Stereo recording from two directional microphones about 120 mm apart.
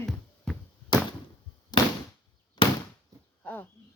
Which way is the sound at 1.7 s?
35° left (ahead or behind).